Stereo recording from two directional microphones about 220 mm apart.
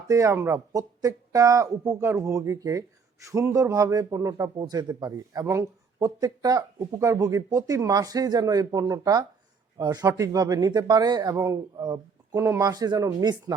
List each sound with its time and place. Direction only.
0.1 s speech: 15° right (ahead or behind)